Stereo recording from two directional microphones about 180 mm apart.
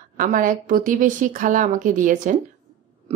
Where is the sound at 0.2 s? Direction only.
50° right (ahead or behind).